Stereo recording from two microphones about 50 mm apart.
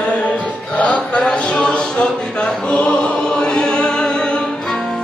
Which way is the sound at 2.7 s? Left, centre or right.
Left.